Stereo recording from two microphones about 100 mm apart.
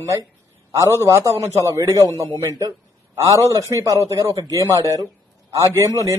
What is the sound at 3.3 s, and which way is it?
A man's voice, 35° right (ahead or behind).